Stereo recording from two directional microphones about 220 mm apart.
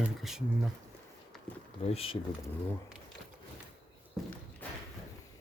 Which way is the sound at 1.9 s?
25° left (ahead or behind).